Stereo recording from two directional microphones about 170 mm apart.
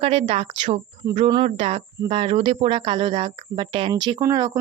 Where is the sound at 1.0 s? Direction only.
25° right (ahead or behind).